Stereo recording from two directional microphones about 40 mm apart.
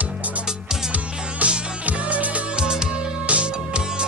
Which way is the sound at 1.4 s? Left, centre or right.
Right.